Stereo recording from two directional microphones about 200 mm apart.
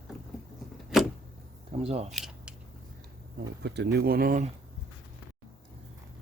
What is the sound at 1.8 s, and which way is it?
Speech, 30° right (ahead or behind).